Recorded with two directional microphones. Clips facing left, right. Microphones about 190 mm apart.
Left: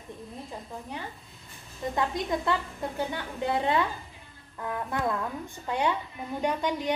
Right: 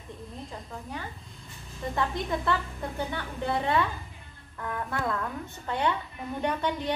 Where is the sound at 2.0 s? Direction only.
15° left (ahead or behind).